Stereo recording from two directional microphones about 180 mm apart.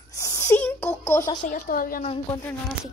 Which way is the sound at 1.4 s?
45° left (ahead or behind).